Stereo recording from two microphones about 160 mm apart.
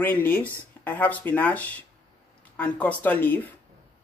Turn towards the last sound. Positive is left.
turn(degrees=10)  # may be behind; listen again after turning